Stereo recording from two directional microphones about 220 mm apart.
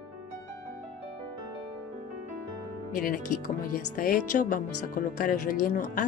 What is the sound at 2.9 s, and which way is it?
Speech, 40° left (ahead or behind).